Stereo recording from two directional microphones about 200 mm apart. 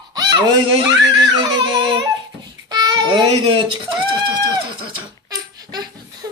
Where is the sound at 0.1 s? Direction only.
20° right (ahead or behind).